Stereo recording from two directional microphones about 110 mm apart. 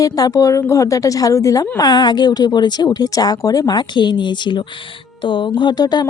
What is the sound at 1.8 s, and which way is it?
A woman's voice, 40° left (ahead or behind).